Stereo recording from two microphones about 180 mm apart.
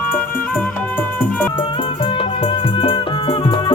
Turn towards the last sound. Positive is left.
turn(degrees=30)  # may be behind; listen again after turning